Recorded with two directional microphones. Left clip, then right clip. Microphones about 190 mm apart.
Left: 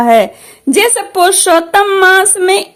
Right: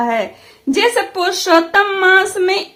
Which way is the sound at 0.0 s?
40° left (ahead or behind).